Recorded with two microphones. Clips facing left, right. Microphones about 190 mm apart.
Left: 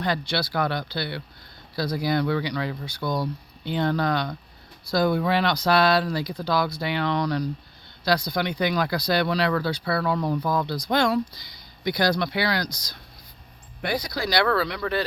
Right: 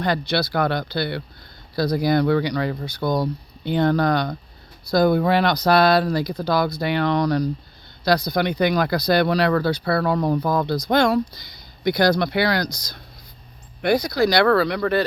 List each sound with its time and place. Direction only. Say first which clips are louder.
0.0 s speech: right 4 dB; 50° right (ahead or behind)